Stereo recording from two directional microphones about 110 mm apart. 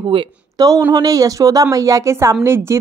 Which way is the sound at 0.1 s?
50° right (ahead or behind).